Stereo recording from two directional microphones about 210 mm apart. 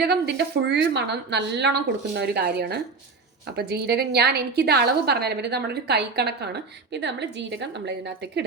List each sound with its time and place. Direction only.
0.0 s a woman's voice: 50° right (ahead or behind)